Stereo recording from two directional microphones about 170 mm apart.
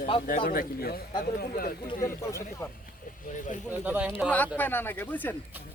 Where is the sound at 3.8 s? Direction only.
10° right (ahead or behind).